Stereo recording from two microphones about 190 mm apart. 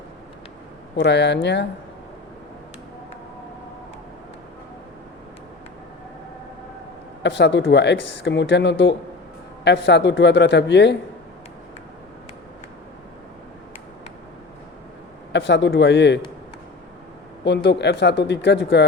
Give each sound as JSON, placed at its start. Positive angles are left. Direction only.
{"t": 0.9, "sound": "speech", "side_deg": 65}
{"t": 7.2, "sound": "speech", "side_deg": 65}
{"t": 15.3, "sound": "speech", "side_deg": 70}
{"t": 17.4, "sound": "speech", "side_deg": 65}